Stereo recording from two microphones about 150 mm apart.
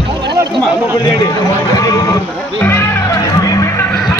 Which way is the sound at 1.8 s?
25° left (ahead or behind).